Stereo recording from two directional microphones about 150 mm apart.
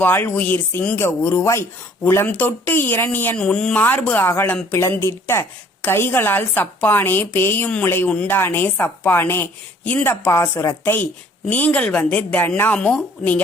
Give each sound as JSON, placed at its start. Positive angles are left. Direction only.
{"t": 0.0, "sound": "speech", "side_deg": 15}